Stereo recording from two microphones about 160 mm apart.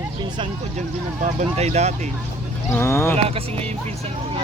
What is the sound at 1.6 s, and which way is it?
Speech, 45° right (ahead or behind).